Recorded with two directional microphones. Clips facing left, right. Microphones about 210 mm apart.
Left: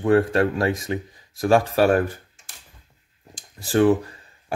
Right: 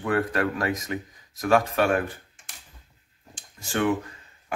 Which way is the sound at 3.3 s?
35° left (ahead or behind).